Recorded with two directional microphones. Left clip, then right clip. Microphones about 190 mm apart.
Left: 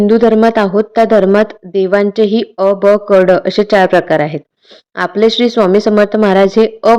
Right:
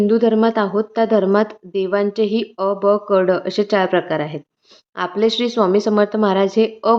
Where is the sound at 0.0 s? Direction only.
30° left (ahead or behind).